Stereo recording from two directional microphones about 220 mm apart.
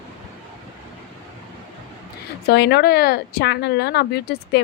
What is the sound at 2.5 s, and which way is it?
Speech, 50° left (ahead or behind).